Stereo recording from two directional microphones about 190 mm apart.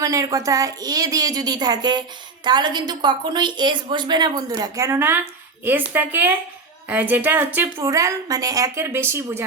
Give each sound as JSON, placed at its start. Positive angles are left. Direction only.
{"t": 0.0, "sound": "a woman's voice", "side_deg": -15}